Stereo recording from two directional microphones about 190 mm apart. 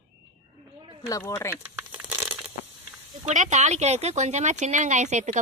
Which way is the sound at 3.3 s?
40° right (ahead or behind).